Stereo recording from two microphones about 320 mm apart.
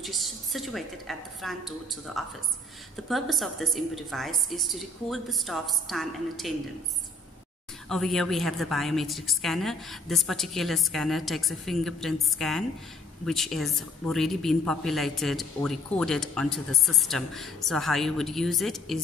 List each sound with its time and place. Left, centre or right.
0.0 s speech: centre
7.9 s speech: centre